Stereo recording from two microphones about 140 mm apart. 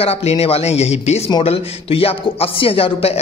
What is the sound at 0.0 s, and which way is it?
Speech, 45° left (ahead or behind).